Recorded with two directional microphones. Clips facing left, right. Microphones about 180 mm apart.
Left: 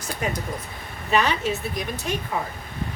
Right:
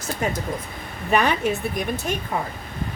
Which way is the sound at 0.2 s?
45° right (ahead or behind).